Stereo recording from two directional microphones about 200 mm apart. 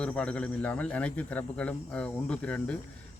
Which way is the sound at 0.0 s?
5° left (ahead or behind).